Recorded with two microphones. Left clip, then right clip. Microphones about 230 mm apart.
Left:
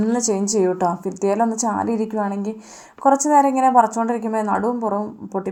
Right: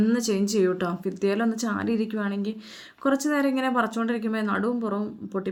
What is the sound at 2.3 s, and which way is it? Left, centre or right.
Speech, left.